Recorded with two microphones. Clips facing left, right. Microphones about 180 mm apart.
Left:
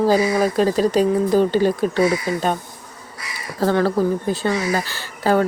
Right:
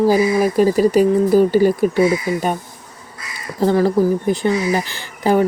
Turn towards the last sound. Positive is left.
turn(degrees=-15)  # may be behind; listen again after turning